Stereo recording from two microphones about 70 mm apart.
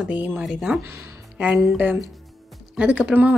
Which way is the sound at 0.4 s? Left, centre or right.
Centre.